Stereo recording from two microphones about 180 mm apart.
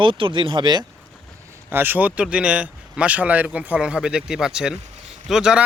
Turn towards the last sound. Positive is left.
turn(degrees=-5)  # may be behind; listen again after turning